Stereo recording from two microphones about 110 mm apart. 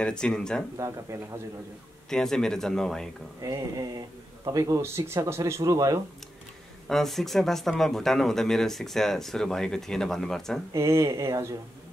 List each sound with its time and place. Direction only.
0.0 s speech: 5° left (ahead or behind)
1.1 s speech: 25° right (ahead or behind)
2.0 s speech: 5° left (ahead or behind)
3.4 s speech: 30° right (ahead or behind)
6.9 s speech: 5° left (ahead or behind)
10.7 s speech: 25° right (ahead or behind)